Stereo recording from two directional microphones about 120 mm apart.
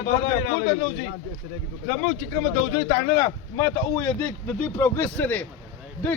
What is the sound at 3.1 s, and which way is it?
A man's voice, 25° left (ahead or behind).